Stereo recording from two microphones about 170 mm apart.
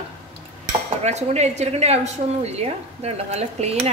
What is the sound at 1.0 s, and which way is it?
A woman's voice, 40° right (ahead or behind).